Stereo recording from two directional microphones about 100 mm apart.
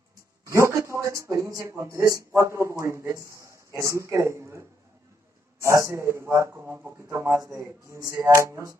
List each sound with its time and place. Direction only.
0.5 s speech: 30° right (ahead or behind); by 7.0 s 15° right (ahead or behind)
7.0 s speech: 25° right (ahead or behind)